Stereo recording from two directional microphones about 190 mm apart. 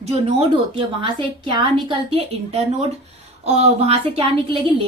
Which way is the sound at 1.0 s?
25° right (ahead or behind).